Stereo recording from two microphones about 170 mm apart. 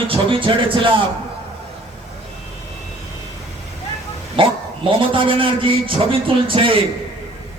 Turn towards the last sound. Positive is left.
turn(degrees=-30)  # may be behind; listen again after turning